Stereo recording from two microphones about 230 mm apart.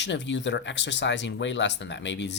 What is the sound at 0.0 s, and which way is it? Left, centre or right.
Speech, left.